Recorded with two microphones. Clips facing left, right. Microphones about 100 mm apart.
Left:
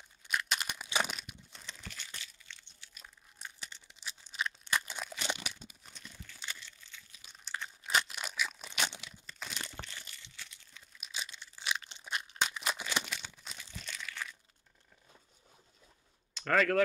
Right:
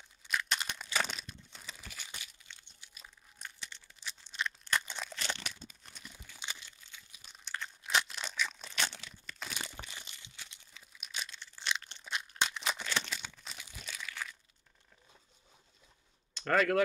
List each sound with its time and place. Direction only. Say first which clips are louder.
0.2 s a sound: even; 5° left (ahead or behind)
1.5 s a sound: left 1 dB; 5° right (ahead or behind)
2.0 s crumpling: even; 15° right (ahead or behind)
3.5 s crumpling: even; 5° left (ahead or behind)
5.9 s crumpling: right 1 dB; 10° right (ahead or behind)
7.2 s crumpling: even; centre (ahead or behind)
9.6 s crunch: even; 10° right (ahead or behind)
10.7 s a sound: even; centre (ahead or behind)
13.4 s crumpling: left 1 dB; centre (ahead or behind)
16.3 s speech: even; 5° right (ahead or behind)